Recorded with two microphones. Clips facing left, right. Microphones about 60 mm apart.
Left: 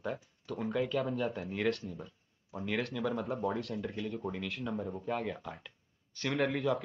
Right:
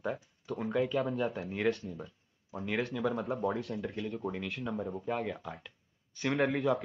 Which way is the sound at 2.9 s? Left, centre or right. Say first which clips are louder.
Right 2 dB; centre.